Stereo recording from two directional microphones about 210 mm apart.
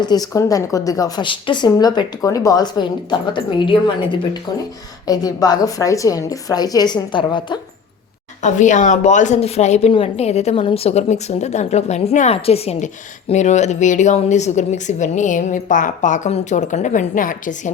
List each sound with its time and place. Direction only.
0.0 s a woman's voice: 20° left (ahead or behind)
8.4 s speech: 35° left (ahead or behind)